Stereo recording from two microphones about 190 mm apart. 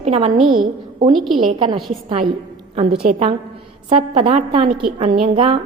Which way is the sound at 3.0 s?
40° right (ahead or behind).